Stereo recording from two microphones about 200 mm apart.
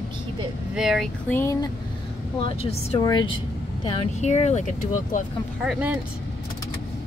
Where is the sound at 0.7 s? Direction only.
Centre (ahead or behind).